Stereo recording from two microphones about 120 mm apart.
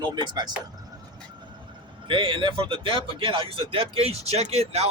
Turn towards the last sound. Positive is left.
turn(degrees=-60)  # may be behind; listen again after turning